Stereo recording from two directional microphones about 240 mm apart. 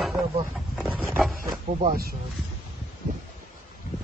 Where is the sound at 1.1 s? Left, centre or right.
Centre.